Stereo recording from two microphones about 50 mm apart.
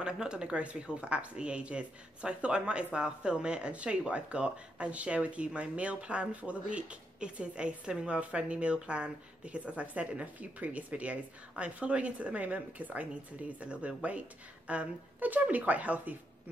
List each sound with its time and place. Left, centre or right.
0.0 s speech: centre